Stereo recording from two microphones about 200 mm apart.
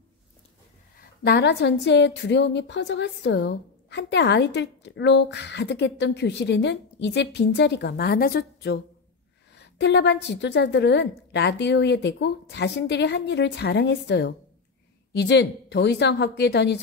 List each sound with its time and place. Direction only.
1.2 s a woman's voice: 55° left (ahead or behind)